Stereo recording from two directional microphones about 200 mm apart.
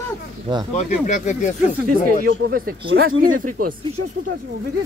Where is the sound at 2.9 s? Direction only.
80° right.